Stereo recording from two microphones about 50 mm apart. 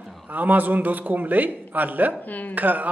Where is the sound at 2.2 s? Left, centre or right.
Left.